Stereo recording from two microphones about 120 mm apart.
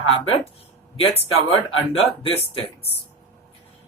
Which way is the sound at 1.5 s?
50° left (ahead or behind).